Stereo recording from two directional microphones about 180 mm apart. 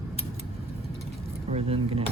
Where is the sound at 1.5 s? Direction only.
35° right (ahead or behind).